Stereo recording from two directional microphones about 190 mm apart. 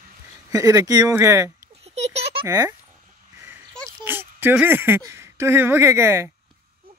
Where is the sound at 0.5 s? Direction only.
20° right (ahead or behind).